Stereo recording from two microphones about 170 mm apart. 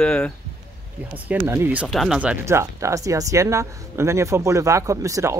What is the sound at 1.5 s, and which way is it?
Speech, 10° right (ahead or behind).